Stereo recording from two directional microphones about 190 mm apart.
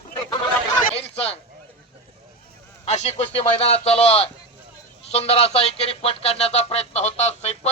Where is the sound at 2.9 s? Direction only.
35° left (ahead or behind).